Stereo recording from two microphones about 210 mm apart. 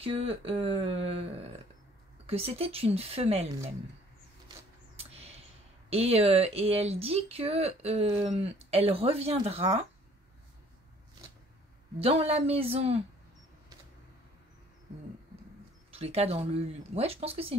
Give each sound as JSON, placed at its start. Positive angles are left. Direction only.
{"t": 0.0, "sound": "speech", "side_deg": -30}
{"t": 4.9, "sound": "a sound", "side_deg": -30}
{"t": 5.9, "sound": "speech", "side_deg": -30}
{"t": 12.0, "sound": "speech", "side_deg": -30}
{"t": 15.9, "sound": "speech", "side_deg": -30}